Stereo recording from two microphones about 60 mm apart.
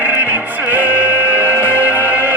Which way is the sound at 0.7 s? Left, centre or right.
Right.